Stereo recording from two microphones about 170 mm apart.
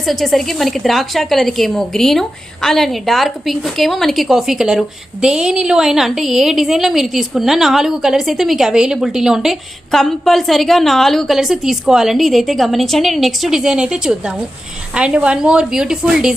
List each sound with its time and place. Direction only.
0.0 s a woman's voice: centre (ahead or behind)